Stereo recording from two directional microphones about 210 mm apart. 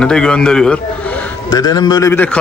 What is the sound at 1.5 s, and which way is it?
Speech, 20° left (ahead or behind).